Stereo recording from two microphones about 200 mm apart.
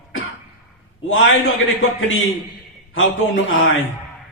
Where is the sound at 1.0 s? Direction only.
80° left.